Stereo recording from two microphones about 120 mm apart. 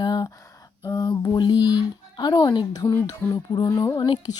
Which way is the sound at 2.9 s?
25° left (ahead or behind).